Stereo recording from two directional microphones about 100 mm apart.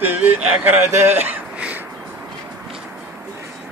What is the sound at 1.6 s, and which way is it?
Crow, 15° right (ahead or behind).